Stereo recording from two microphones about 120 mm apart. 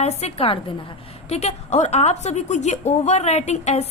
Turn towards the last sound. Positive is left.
turn(degrees=65)  # may be behind; listen again after turning